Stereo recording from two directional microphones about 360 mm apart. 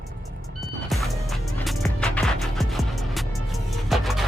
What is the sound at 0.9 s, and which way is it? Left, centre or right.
Music, centre.